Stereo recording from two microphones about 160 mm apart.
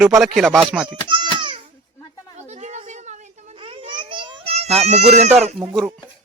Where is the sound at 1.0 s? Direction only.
30° right (ahead or behind).